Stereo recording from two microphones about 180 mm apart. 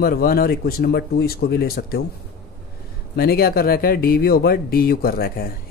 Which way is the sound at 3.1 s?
55° left (ahead or behind).